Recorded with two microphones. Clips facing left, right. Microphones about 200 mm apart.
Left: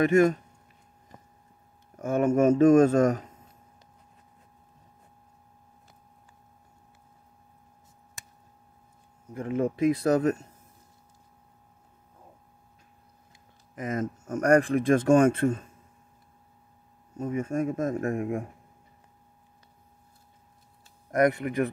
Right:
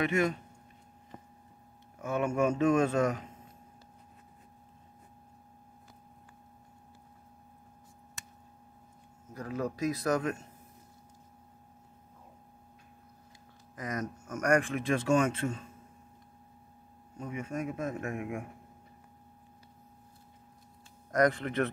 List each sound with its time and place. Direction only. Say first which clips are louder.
0.0 s a man's voice: left 8 dB; 45° left (ahead or behind)
2.0 s a man's voice: left 7 dB; 45° left (ahead or behind)
9.3 s speech: left 7 dB; 25° left (ahead or behind)
13.7 s speech: left 6 dB; 25° left (ahead or behind)
14.2 s a man's voice: left 6 dB; 35° left (ahead or behind); by 15.6 s 55° left (ahead or behind)
17.2 s a man's voice: left 8 dB; 45° left (ahead or behind)
21.1 s speech: left 4 dB; 25° left (ahead or behind)
21.4 s speech: left 4 dB; 10° left (ahead or behind)